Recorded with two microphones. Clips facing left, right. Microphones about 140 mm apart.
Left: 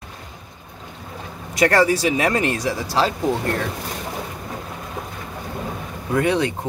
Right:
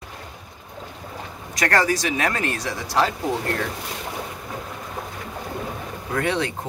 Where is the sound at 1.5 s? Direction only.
25° left (ahead or behind).